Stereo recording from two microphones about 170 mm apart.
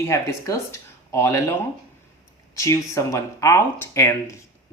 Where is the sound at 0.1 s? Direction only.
20° left (ahead or behind).